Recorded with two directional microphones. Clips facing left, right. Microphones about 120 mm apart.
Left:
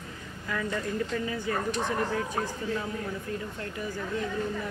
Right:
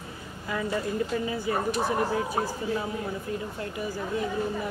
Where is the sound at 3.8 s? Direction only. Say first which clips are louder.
Right 2 dB; 20° right (ahead or behind).